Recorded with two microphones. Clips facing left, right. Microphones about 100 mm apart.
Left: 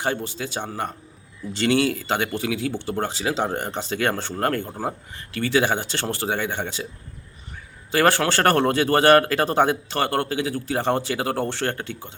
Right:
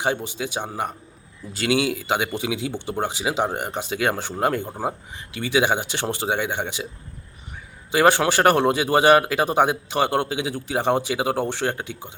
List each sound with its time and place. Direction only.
0.0 s speech: 15° right (ahead or behind)
7.9 s speech: 15° right (ahead or behind)